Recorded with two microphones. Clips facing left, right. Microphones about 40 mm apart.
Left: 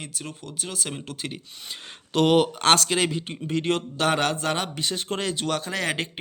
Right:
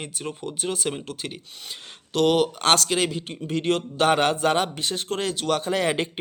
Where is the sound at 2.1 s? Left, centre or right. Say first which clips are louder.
Left 1 dB; centre.